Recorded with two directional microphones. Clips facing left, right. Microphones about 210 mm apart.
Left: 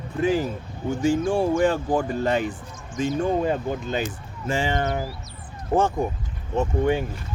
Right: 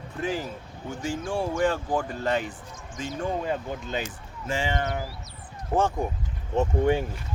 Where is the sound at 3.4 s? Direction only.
45° left (ahead or behind).